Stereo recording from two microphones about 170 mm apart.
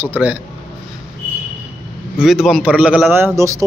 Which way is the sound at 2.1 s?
5° right (ahead or behind).